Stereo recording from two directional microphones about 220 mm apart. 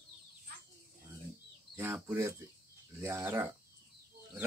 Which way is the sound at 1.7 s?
10° right (ahead or behind).